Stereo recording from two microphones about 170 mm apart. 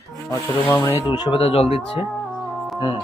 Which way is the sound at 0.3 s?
15° left (ahead or behind).